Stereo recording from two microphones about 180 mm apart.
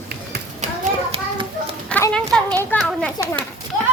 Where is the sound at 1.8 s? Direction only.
5° left (ahead or behind).